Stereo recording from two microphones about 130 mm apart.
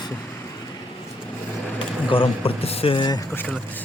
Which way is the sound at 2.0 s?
45° left (ahead or behind).